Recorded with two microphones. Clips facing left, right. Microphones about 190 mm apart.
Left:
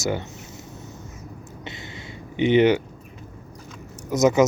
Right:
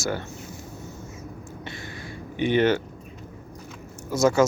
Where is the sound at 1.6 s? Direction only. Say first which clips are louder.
Left 1 dB; 20° left (ahead or behind).